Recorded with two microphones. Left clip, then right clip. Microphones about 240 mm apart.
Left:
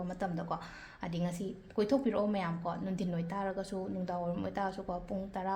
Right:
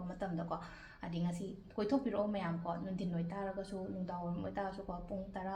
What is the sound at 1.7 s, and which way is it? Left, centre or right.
A woman's voice, left.